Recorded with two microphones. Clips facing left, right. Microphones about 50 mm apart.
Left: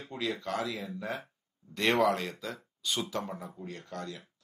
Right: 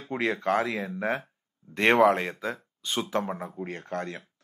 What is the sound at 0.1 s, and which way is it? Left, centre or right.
Speech, right.